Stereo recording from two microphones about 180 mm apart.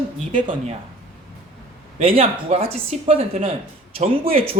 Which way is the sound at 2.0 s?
30° right (ahead or behind).